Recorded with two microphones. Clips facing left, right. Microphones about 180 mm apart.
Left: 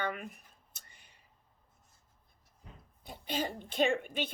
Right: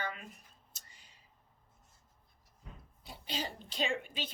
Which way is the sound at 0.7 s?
60° left (ahead or behind).